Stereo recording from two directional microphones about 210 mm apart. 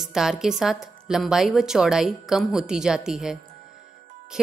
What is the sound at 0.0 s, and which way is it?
A woman's voice, centre (ahead or behind).